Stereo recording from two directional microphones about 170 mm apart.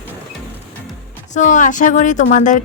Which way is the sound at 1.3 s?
45° left (ahead or behind).